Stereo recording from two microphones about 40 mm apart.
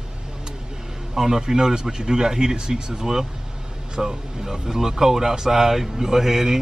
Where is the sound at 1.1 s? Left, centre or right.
Centre.